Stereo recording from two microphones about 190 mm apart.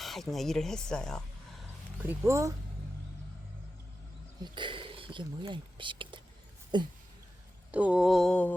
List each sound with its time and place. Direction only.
0.0 s speech: centre (ahead or behind)
2.0 s speech: 10° right (ahead or behind)
4.5 s speech: 25° right (ahead or behind)
7.7 s speech: 5° right (ahead or behind)